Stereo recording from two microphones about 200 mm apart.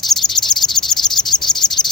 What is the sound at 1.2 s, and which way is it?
Cricket, 20° left (ahead or behind).